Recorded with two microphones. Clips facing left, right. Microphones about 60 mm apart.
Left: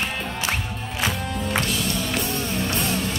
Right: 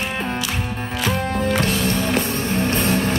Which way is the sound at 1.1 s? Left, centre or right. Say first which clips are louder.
Right 8 dB; right.